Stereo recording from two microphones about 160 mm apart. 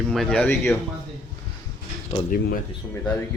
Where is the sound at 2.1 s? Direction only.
35° left (ahead or behind).